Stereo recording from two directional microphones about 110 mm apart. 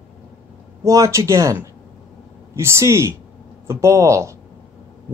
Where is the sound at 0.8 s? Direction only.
30° right (ahead or behind).